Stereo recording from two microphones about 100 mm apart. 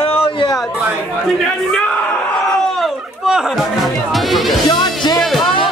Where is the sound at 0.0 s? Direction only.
70° left (ahead or behind).